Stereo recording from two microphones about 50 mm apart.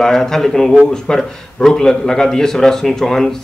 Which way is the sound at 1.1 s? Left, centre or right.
Centre.